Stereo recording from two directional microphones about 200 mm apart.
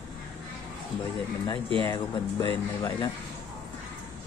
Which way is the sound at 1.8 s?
20° left (ahead or behind).